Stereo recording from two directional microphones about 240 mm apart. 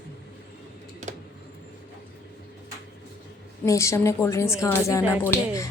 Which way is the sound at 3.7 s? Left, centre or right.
Centre.